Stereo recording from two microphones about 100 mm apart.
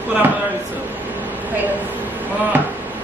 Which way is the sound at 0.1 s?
15° right (ahead or behind).